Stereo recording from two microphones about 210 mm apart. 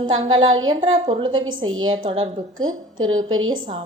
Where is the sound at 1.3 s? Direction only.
70° right (ahead or behind).